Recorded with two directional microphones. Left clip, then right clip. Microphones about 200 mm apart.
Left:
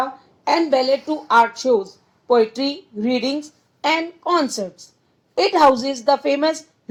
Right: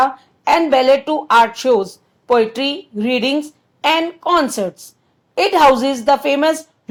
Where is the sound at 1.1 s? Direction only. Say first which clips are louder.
Right 3 dB; 35° right (ahead or behind).